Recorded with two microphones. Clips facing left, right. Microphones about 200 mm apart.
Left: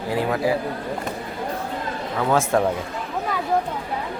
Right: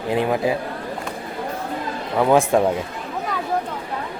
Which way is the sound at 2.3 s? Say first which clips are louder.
Right 3 dB; 15° right (ahead or behind).